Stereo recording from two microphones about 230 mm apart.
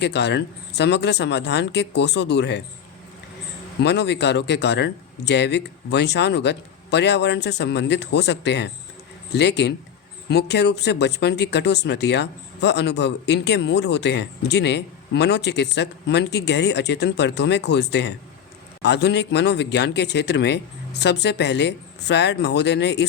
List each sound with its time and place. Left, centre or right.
0.0 s speech: left
3.8 s speech: left